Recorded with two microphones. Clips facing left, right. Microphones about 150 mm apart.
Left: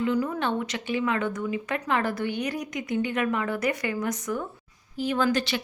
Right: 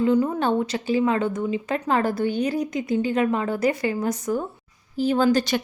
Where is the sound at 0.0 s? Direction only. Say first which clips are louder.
Right 5 dB; 30° right (ahead or behind).